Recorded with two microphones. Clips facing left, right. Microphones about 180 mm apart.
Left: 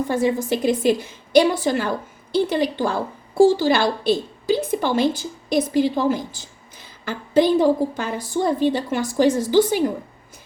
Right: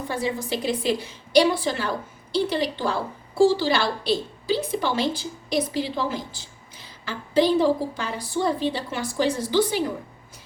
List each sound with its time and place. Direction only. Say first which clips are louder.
0.1 s a woman's voice: left 4 dB; 50° left (ahead or behind)